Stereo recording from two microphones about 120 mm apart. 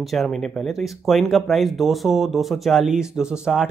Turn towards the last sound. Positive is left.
turn(degrees=-5)  # may be behind; listen again after turning